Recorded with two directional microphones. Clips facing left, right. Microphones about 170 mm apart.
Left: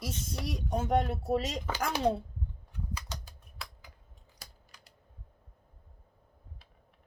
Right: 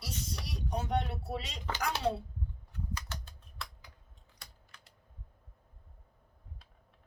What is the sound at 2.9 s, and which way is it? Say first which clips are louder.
Typing: left 1 dB; 10° left (ahead or behind).